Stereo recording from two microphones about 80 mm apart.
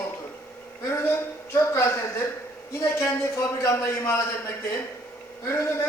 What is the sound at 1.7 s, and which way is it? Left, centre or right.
A man's voice, left.